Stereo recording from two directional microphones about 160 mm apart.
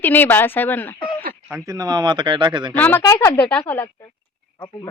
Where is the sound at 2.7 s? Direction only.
10° left (ahead or behind).